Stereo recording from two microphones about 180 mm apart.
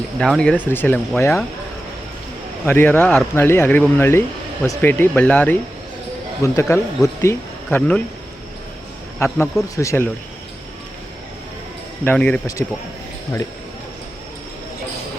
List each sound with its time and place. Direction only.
0.2 s speech: 5° left (ahead or behind)
2.6 s speech: 10° left (ahead or behind)
9.1 s speech: 15° left (ahead or behind)
12.0 s speech: 5° left (ahead or behind)